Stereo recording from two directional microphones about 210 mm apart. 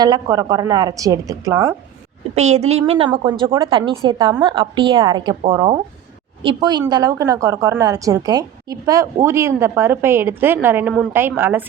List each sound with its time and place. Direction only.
0.0 s a woman's voice: 20° right (ahead or behind)
2.3 s a woman's voice: 30° right (ahead or behind); by 11.7 s 10° right (ahead or behind)